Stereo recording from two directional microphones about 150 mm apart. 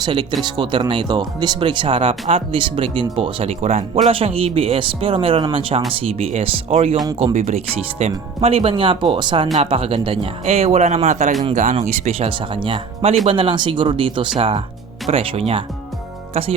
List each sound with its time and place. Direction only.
0.0 s speech: 30° right (ahead or behind)